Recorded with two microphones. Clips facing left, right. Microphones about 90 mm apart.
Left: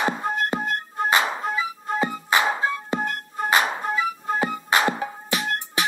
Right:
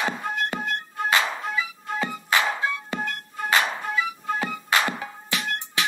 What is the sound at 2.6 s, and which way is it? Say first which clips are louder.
Music: left 3 dB; 35° left (ahead or behind).